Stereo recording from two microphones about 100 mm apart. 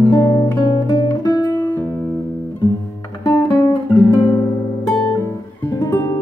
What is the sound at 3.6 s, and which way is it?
Guitar, 35° left (ahead or behind).